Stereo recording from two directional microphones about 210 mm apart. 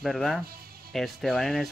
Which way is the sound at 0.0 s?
Centre (ahead or behind).